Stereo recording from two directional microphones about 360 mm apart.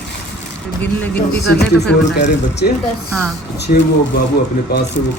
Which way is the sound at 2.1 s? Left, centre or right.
Left.